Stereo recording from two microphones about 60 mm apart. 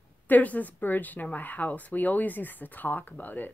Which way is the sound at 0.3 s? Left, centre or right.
Left.